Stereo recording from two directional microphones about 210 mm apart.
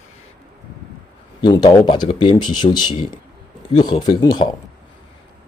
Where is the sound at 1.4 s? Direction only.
20° left (ahead or behind).